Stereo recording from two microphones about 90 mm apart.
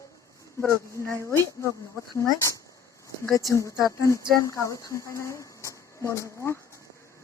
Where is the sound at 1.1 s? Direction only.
30° left (ahead or behind).